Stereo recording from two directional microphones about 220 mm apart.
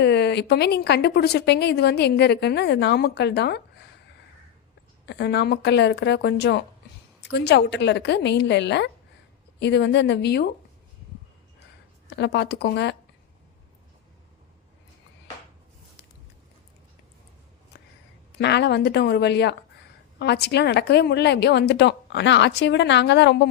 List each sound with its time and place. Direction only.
0.0 s a woman's voice: 50° left (ahead or behind)
5.0 s a woman's voice: 50° left (ahead or behind)
12.1 s a woman's voice: 50° left (ahead or behind)
18.3 s a woman's voice: 50° left (ahead or behind)